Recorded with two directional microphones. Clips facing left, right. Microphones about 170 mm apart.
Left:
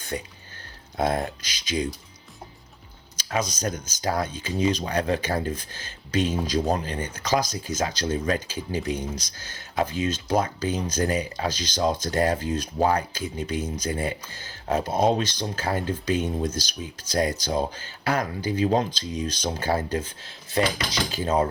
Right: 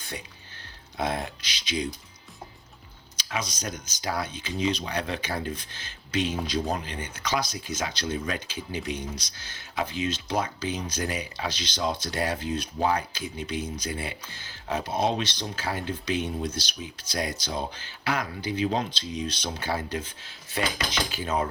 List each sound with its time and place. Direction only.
0.1 s speech: 40° left (ahead or behind)
3.2 s speech: 45° left (ahead or behind)